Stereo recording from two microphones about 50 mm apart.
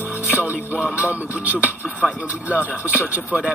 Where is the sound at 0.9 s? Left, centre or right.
Right.